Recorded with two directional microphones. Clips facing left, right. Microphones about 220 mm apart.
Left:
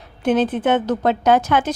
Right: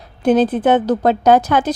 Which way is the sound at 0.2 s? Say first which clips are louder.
Right 4 dB; 35° right (ahead or behind).